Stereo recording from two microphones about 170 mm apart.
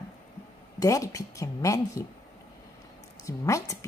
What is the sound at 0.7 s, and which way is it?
A woman's voice, 20° left (ahead or behind).